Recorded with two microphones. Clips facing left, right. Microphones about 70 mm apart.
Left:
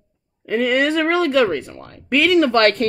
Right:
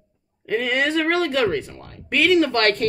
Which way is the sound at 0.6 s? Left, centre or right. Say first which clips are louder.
Left 4 dB; left.